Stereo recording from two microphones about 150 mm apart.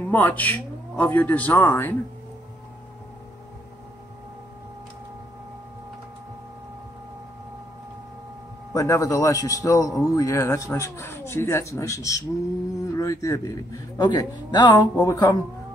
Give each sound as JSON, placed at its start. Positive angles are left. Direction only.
{"t": 0.0, "sound": "speech", "side_deg": 10}
{"t": 8.7, "sound": "a man's voice", "side_deg": 20}